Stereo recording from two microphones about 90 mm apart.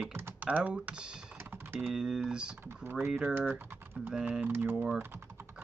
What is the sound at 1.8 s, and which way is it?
Speech, 5° right (ahead or behind).